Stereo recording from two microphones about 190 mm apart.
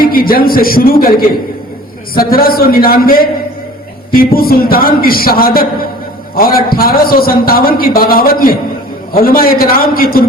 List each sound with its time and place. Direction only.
0.0 s a man's voice: 50° left (ahead or behind)